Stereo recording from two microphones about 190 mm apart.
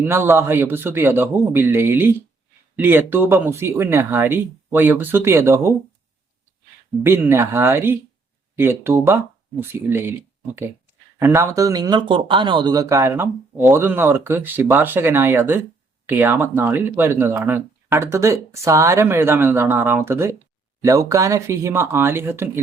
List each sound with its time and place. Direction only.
0.1 s speech: 10° right (ahead or behind)
7.0 s speech: 15° right (ahead or behind)